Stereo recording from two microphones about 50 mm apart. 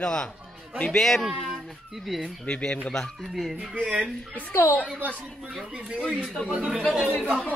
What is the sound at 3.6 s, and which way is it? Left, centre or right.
Speech, right.